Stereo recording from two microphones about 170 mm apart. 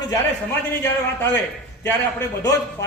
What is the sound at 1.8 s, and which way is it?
Speech, 10° left (ahead or behind).